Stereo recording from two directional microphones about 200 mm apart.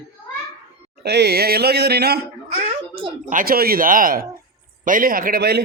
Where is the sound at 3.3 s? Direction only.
45° right (ahead or behind).